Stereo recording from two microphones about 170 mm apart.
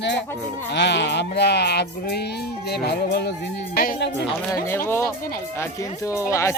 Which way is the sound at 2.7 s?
70° left (ahead or behind).